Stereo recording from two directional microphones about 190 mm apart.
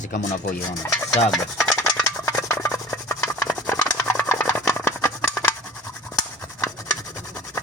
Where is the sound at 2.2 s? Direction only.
15° left (ahead or behind).